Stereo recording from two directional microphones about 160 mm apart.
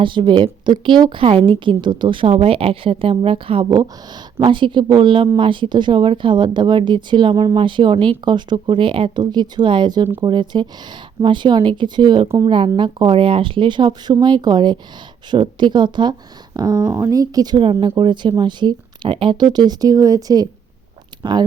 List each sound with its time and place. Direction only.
0.0 s a woman's voice: 30° right (ahead or behind)